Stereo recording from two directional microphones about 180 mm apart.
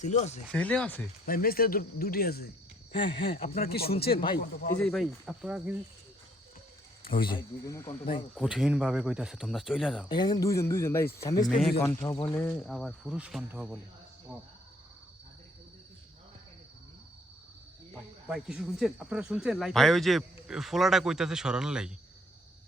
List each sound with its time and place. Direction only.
0.0 s speech: 40° left (ahead or behind)
0.5 s speech: 5° left (ahead or behind)
1.2 s speech: 55° left (ahead or behind)
2.9 s speech: 30° left (ahead or behind)
3.6 s speech: 60° left (ahead or behind)
4.8 s speech: centre (ahead or behind)
7.0 s speech: 30° left (ahead or behind)
8.4 s speech: 5° right (ahead or behind)
10.1 s speech: 25° left (ahead or behind)
12.5 s speech: centre (ahead or behind)
18.3 s speech: 5° right (ahead or behind)